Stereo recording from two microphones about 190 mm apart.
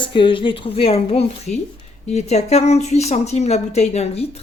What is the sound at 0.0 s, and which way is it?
A woman's voice, 25° left (ahead or behind).